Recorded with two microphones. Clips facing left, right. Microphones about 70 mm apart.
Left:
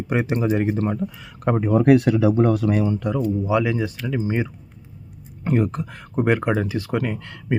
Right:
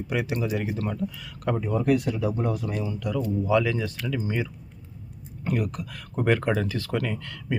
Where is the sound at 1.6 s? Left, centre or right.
Left.